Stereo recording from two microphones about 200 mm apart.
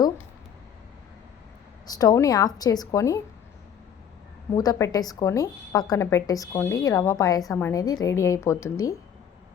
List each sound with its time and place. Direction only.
1.9 s a woman's voice: 20° left (ahead or behind)
4.5 s a woman's voice: 20° left (ahead or behind)